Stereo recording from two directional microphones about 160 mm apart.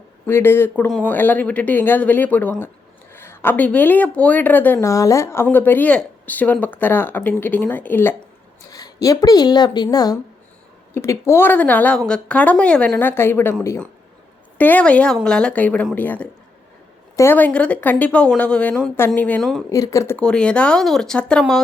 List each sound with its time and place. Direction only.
0.3 s speech: 15° left (ahead or behind)
19.7 s speech: 20° left (ahead or behind)
20.1 s speech: 5° left (ahead or behind)